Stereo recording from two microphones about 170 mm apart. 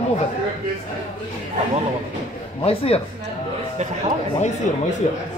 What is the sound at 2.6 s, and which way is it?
Speech, 35° left (ahead or behind).